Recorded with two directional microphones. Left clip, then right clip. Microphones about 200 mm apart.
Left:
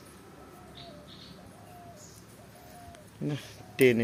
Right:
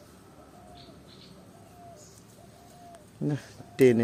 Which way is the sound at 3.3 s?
35° right (ahead or behind).